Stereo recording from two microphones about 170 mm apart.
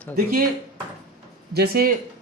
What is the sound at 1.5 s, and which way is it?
Speech, 65° right (ahead or behind).